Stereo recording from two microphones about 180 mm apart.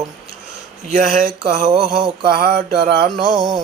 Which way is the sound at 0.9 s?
50° right (ahead or behind).